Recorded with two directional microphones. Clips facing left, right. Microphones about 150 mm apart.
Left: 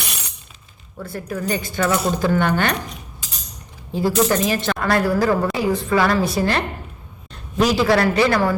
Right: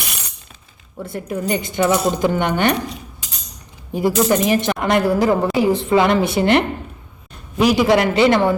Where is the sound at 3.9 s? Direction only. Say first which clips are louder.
Right 2 dB; 15° right (ahead or behind).